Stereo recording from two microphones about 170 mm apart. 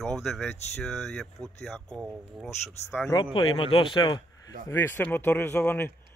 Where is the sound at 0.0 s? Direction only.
Centre (ahead or behind).